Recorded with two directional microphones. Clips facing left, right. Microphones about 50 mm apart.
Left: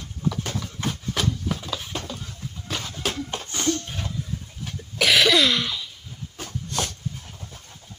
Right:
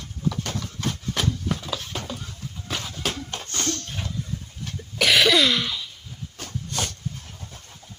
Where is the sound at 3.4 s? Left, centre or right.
Centre.